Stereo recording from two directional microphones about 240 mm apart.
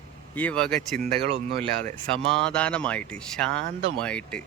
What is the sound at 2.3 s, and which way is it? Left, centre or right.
Speech, centre.